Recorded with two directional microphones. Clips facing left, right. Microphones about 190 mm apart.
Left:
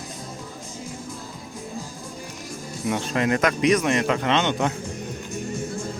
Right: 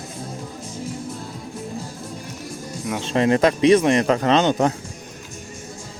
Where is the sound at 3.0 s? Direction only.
30° right (ahead or behind).